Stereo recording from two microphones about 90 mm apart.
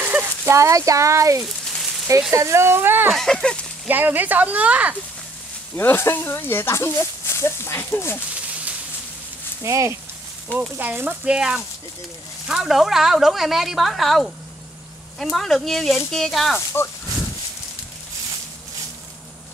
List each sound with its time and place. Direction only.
0.0 s a sound: 20° right (ahead or behind)
0.5 s speech: 35° right (ahead or behind)
3.1 s a woman's voice: 5° left (ahead or behind)
3.8 s speech: 20° right (ahead or behind)
5.8 s speech: 25° left (ahead or behind)
9.6 s speech: 35° right (ahead or behind)
10.8 s a woman's voice: 20° right (ahead or behind); by 16.5 s centre (ahead or behind)
16.5 s speech: 25° left (ahead or behind)